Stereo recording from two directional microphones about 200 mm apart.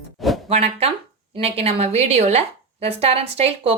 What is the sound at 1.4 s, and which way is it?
A woman's voice, 30° right (ahead or behind).